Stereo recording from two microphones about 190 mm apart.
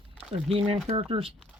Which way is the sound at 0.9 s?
30° right (ahead or behind).